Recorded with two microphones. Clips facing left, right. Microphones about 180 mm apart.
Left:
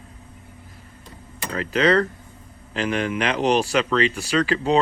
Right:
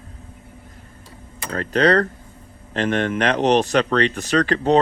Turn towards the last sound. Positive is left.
turn(degrees=-40)  # may be behind; listen again after turning